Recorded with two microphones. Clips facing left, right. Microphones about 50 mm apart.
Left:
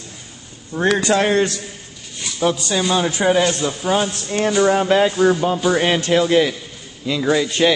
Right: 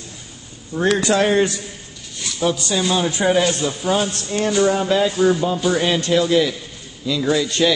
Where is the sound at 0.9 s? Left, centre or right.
Left.